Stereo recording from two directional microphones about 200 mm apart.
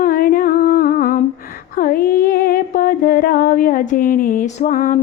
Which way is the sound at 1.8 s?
45° left (ahead or behind).